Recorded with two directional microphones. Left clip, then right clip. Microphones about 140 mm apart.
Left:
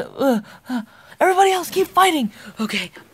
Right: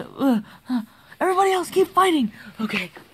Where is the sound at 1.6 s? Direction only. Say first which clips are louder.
Even; 5° right (ahead or behind).